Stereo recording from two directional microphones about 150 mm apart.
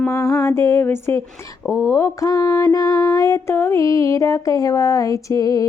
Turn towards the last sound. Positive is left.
turn(degrees=25)  # may be behind; listen again after turning